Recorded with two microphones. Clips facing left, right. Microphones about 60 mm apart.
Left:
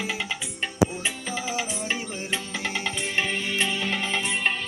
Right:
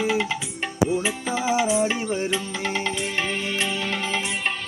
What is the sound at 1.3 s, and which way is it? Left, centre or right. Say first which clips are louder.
Music: right 10 dB; right.